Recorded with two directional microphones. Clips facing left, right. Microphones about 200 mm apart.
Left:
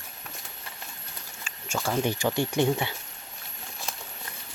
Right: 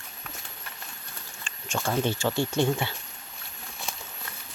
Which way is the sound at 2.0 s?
15° left (ahead or behind).